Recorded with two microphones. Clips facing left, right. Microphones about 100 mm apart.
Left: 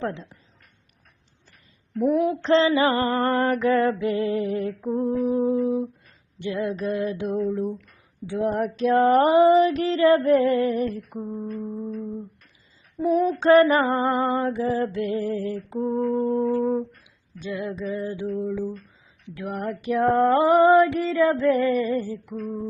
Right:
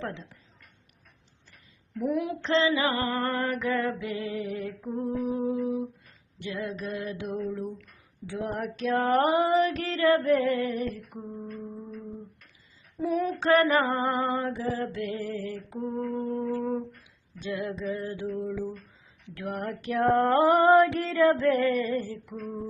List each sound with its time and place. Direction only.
2.1 s female singing: 35° left (ahead or behind)
13.0 s female singing: 25° left (ahead or behind)
16.0 s female singing: 40° left (ahead or behind)
16.4 s a sound: 20° left (ahead or behind)
17.4 s a sound: 5° left (ahead or behind)
18.3 s female singing: centre (ahead or behind)